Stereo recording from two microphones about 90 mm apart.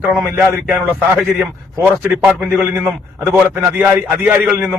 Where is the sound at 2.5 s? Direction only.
20° right (ahead or behind).